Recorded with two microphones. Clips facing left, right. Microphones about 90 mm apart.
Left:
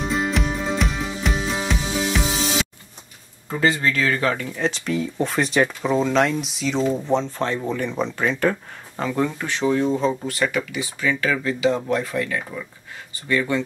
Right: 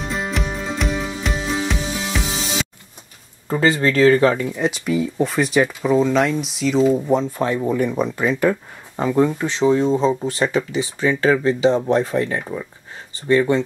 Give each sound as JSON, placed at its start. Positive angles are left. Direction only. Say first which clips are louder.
{"t": 0.0, "sound": "music", "louder": "left 2 dB", "side_deg": 0}
{"t": 3.4, "sound": "speech", "louder": "right 3 dB", "side_deg": -35}
{"t": 4.6, "sound": "speech", "louder": "right 2 dB", "side_deg": -10}